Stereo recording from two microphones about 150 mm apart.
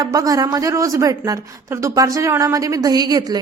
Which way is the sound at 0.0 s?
25° right (ahead or behind).